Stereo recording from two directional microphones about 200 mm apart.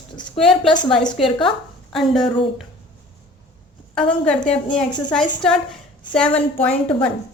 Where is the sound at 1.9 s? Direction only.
Centre (ahead or behind).